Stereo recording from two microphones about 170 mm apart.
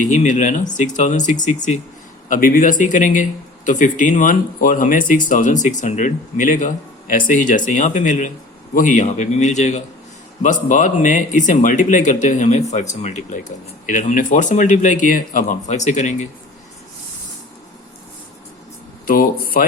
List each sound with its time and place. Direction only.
0.1 s speech: 45° left (ahead or behind)
19.0 s speech: 55° left (ahead or behind)